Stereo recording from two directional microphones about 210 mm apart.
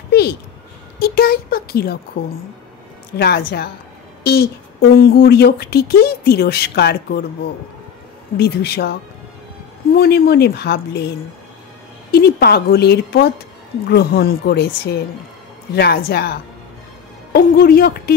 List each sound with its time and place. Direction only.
0.1 s a sound: 50° left (ahead or behind)
0.9 s speech: 45° left (ahead or behind)
3.2 s speech: 50° left (ahead or behind)
8.4 s speech: 50° left (ahead or behind)
9.9 s speech: 45° left (ahead or behind)
12.1 s speech: 45° left (ahead or behind)
15.7 s speech: 50° left (ahead or behind)